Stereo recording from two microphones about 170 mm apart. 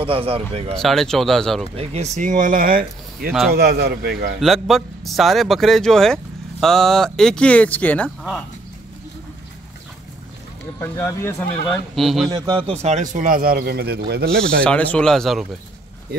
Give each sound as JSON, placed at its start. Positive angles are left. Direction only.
{"t": 0.0, "sound": "a man's voice", "side_deg": -35}
{"t": 0.7, "sound": "speech", "side_deg": 0}
{"t": 1.8, "sound": "a man's voice", "side_deg": -40}
{"t": 4.4, "sound": "speech", "side_deg": 0}
{"t": 10.8, "sound": "speech", "side_deg": 15}
{"t": 11.9, "sound": "speech", "side_deg": 0}
{"t": 12.3, "sound": "a man's voice", "side_deg": -25}
{"t": 14.6, "sound": "speech", "side_deg": 5}